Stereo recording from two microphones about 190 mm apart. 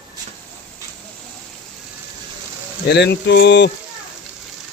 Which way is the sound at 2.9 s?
65° left (ahead or behind).